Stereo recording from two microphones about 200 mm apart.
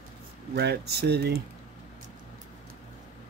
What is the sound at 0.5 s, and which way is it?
Speech, 55° right (ahead or behind).